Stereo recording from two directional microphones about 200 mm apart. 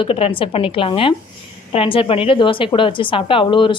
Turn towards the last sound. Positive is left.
turn(degrees=25)  # may be behind; listen again after turning